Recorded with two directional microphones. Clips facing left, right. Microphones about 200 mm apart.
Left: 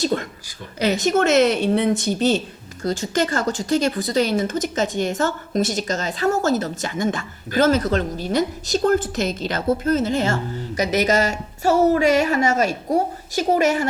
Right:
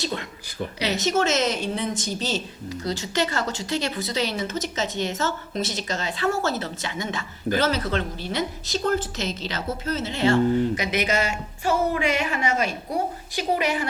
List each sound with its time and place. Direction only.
0.0 s a woman's voice: 45° left (ahead or behind)
2.8 s a woman's voice: 45° left (ahead or behind)